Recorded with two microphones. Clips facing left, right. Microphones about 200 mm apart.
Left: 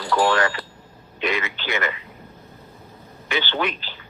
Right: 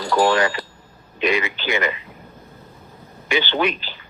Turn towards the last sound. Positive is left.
turn(degrees=-15)  # may be behind; listen again after turning